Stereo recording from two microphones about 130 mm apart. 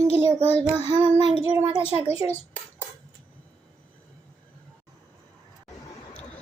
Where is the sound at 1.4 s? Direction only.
20° right (ahead or behind).